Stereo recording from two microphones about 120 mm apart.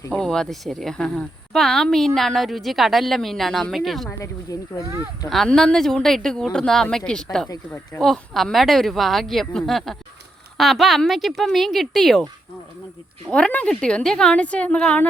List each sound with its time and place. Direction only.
0.1 s speech: 5° left (ahead or behind)
4.8 s speech: 25° right (ahead or behind)
5.3 s speech: 5° left (ahead or behind)
7.4 s speech: 25° left (ahead or behind)
7.9 s speech: 5° left (ahead or behind)
13.3 s a woman's voice: 10° left (ahead or behind)